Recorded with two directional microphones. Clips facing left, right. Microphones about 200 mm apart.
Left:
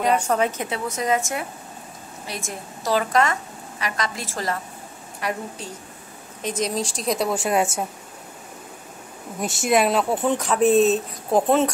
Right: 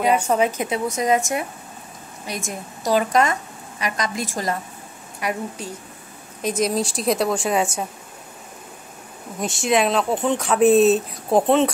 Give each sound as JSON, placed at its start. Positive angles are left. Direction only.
{"t": 0.0, "sound": "speech", "side_deg": -10}
{"t": 6.4, "sound": "speech", "side_deg": -10}
{"t": 9.4, "sound": "speech", "side_deg": 5}